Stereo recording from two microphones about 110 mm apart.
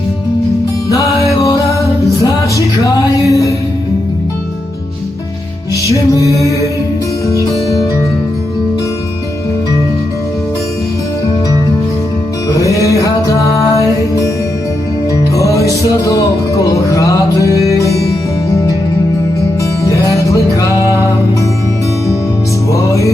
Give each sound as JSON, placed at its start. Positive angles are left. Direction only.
{"t": 1.3, "sound": "music", "side_deg": 30}
{"t": 5.9, "sound": "music", "side_deg": 30}
{"t": 12.5, "sound": "music", "side_deg": 30}
{"t": 15.4, "sound": "music", "side_deg": 30}
{"t": 19.8, "sound": "music", "side_deg": 30}